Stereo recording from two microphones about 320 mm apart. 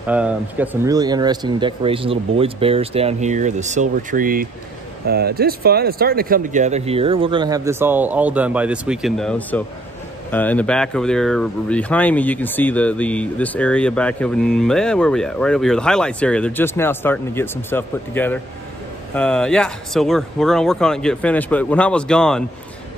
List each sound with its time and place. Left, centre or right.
0.0 s speech: centre